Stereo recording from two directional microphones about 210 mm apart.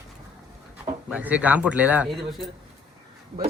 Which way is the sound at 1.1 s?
5° right (ahead or behind).